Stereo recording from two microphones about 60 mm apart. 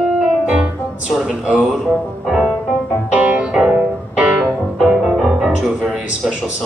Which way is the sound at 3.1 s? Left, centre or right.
Right.